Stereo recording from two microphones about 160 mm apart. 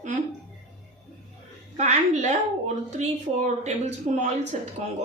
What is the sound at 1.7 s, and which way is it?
Speech, 50° right (ahead or behind).